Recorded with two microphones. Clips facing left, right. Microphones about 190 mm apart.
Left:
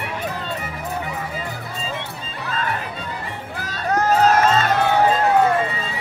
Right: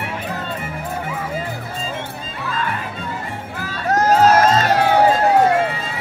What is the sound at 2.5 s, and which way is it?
Music, 40° left (ahead or behind).